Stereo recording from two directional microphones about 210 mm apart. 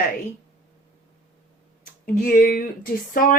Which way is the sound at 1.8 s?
40° left (ahead or behind).